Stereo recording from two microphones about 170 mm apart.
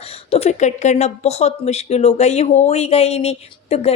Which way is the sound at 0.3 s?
35° left (ahead or behind).